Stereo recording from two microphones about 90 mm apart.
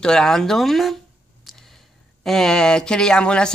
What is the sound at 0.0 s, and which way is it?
Speech, 5° left (ahead or behind).